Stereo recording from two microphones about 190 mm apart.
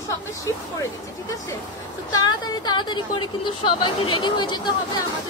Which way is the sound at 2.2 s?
20° left (ahead or behind).